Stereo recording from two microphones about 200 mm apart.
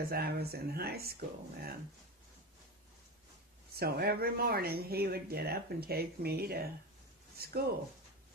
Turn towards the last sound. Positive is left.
turn(degrees=-50)  # may be behind; listen again after turning